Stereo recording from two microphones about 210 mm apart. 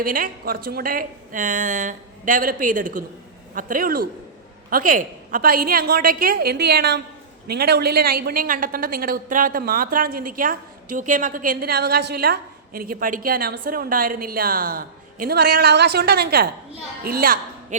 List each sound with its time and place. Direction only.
0.0 s a woman's voice: 40° right (ahead or behind)